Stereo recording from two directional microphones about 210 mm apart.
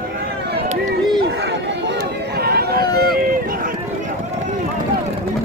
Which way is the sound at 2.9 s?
45° right (ahead or behind).